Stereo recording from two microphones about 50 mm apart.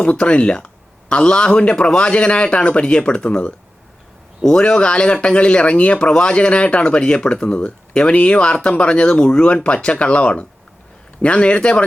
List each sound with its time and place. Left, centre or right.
0.0 s speech: left